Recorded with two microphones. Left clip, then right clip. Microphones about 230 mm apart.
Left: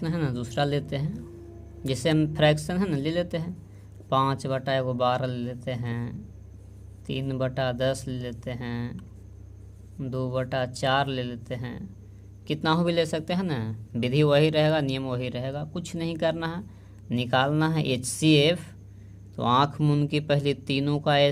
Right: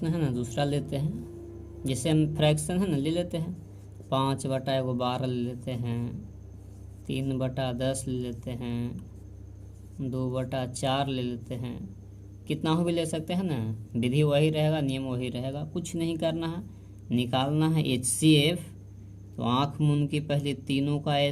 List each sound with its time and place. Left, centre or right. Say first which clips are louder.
0.0 s a man's voice: even; left